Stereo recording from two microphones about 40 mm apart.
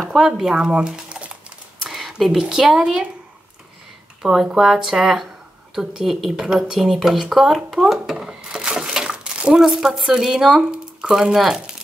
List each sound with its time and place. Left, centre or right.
0.1 s speech: centre
0.6 s speech: right
1.8 s a sound: centre
2.5 s speech: centre
4.2 s speech: centre
8.2 s a sound: right
9.7 s speech: centre
10.7 s squish: centre
11.3 s speech: centre